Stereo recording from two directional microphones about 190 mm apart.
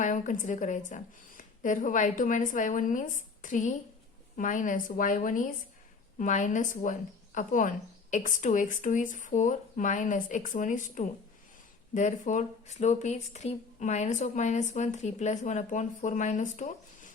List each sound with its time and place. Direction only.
0.0 s speech: 40° left (ahead or behind)